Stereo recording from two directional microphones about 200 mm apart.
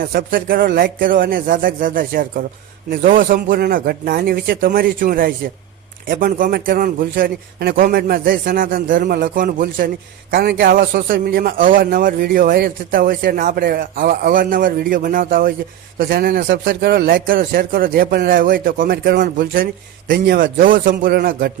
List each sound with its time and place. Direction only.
0.0 s a man's voice: 45° right (ahead or behind)